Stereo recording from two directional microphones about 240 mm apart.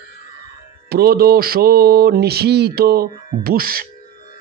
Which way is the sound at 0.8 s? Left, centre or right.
Right.